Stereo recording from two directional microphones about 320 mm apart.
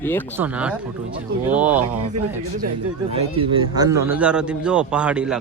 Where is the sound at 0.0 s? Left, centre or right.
Centre.